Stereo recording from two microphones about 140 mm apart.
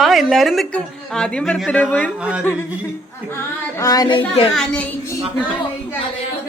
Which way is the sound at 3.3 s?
20° left (ahead or behind).